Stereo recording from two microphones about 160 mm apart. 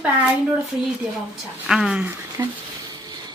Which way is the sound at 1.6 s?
5° right (ahead or behind).